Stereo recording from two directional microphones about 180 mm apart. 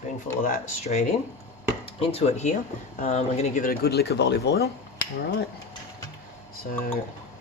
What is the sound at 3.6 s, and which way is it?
Speech, 60° left (ahead or behind).